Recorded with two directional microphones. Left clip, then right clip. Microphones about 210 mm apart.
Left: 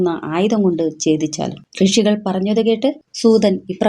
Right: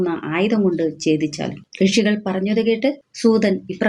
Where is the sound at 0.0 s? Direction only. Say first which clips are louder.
Left 3 dB; 40° left (ahead or behind).